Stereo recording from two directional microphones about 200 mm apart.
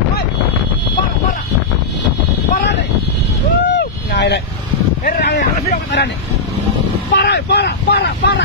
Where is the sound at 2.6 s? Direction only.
60° left (ahead or behind).